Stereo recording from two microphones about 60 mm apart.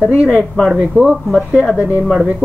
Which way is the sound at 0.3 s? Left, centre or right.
Centre.